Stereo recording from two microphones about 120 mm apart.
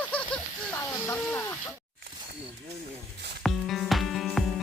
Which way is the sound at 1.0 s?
15° left (ahead or behind).